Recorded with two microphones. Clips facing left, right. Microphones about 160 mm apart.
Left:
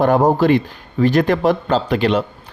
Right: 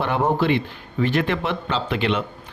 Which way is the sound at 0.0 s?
40° left (ahead or behind).